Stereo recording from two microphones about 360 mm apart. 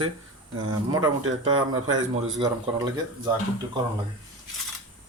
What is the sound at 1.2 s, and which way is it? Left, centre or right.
Speech, right.